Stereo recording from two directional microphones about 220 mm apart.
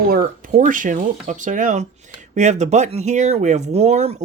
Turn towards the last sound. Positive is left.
turn(degrees=-30)  # may be behind; listen again after turning